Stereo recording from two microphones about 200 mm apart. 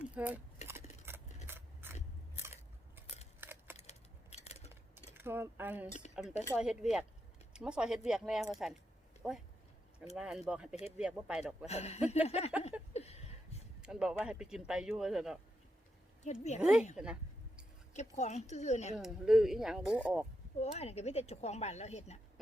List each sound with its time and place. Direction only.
0.0 s speech: 5° right (ahead or behind)
1.1 s keys jangling: 10° right (ahead or behind)
1.5 s scissors: 10° right (ahead or behind)
3.4 s a sound: 10° right (ahead or behind)
3.8 s a sound: 35° left (ahead or behind)
5.1 s speech: 10° right (ahead or behind)
11.6 s speech: 30° left (ahead or behind)
12.9 s a sound: 30° left (ahead or behind)
13.8 s speech: 5° right (ahead or behind)
16.2 s speech: 35° left (ahead or behind)
16.6 s speech: 5° right (ahead or behind)
17.9 s speech: 35° left (ahead or behind)
18.9 s speech: centre (ahead or behind)
20.6 s speech: 30° left (ahead or behind)